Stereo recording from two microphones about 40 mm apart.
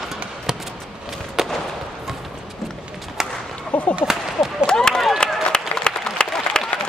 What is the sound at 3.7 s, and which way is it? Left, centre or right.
Whip, left.